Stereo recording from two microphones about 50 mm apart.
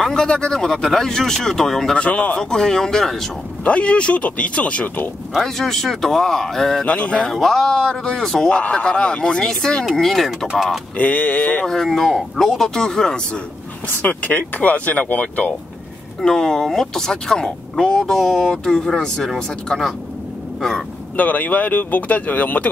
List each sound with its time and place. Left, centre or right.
0.0 s speech: centre
2.0 s speech: left
2.3 s speech: centre
3.6 s speech: left
5.3 s speech: centre
6.9 s speech: left
7.2 s speech: centre
8.5 s speech: left
9.8 s speech: centre
11.0 s speech: left
11.6 s speech: centre
13.8 s speech: left
16.2 s speech: centre
21.2 s speech: left